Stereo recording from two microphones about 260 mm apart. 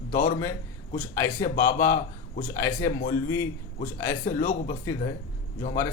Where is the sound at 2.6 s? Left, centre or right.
Centre.